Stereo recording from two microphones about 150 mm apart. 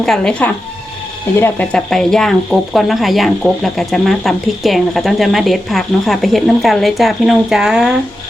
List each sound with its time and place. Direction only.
0.0 s speech: 5° left (ahead or behind)